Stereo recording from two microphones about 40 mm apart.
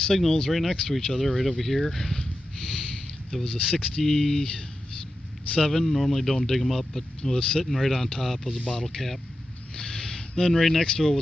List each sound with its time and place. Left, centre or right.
0.0 s a man's voice: centre
5.6 s a man's voice: centre
7.3 s speech: centre
7.7 s speech: centre
8.6 s a man's voice: centre
9.8 s a sound: centre
10.9 s a man's voice: centre